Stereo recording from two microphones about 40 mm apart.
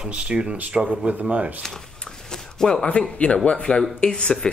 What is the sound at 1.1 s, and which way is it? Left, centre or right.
Speech, right.